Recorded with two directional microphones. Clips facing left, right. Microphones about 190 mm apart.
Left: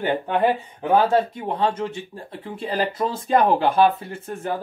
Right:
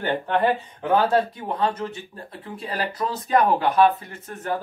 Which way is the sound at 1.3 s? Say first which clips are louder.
Left 2 dB; 25° left (ahead or behind).